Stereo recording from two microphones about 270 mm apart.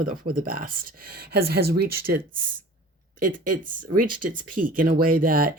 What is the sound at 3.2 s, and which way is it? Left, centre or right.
Speech, right.